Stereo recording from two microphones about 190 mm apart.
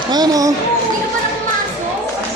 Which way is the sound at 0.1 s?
20° right (ahead or behind).